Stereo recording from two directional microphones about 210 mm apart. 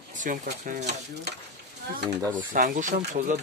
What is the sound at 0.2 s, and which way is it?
Speech, 40° right (ahead or behind).